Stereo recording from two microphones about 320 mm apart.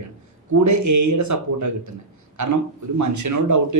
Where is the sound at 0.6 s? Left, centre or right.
Right.